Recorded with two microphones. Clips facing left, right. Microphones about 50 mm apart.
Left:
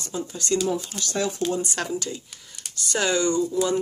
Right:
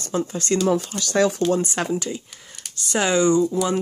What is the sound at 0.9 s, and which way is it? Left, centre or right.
Speech, right.